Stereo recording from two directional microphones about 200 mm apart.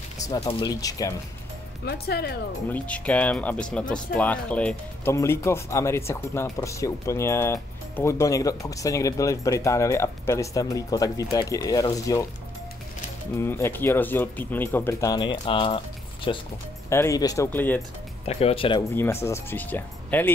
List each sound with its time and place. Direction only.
0.5 s speech: 20° left (ahead or behind)
1.9 s speech: 50° left (ahead or behind)
2.7 s speech: 5° left (ahead or behind)
13.4 s speech: 10° left (ahead or behind)
16.9 s speech: 15° left (ahead or behind)
18.2 s speech: 30° left (ahead or behind)
18.9 s speech: 15° left (ahead or behind)